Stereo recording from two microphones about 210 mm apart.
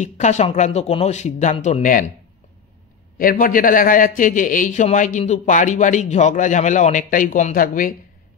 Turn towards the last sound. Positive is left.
turn(degrees=40)  # may be behind; listen again after turning